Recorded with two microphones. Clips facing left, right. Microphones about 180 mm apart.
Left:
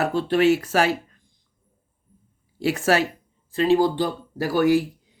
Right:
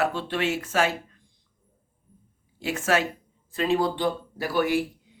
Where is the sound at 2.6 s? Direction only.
35° left (ahead or behind).